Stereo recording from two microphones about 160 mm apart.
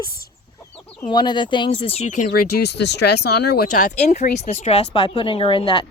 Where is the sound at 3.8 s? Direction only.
45° left (ahead or behind).